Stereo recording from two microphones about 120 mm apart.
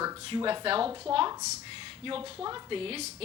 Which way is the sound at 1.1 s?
30° right (ahead or behind).